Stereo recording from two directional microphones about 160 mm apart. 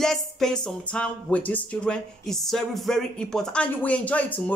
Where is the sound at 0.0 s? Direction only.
5° left (ahead or behind).